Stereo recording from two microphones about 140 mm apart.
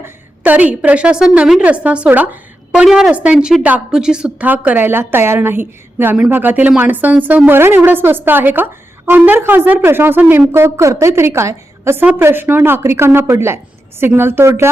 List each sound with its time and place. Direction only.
0.0 s a woman's voice: 10° right (ahead or behind)